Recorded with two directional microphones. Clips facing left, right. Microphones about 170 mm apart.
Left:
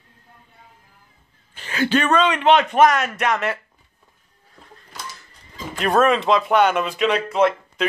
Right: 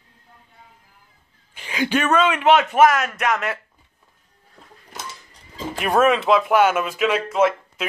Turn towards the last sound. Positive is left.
turn(degrees=-5)  # may be behind; listen again after turning